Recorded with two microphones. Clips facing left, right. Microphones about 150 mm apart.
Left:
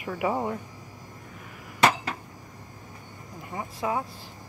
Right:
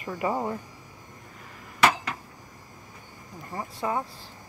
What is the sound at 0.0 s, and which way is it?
Speech, 5° left (ahead or behind).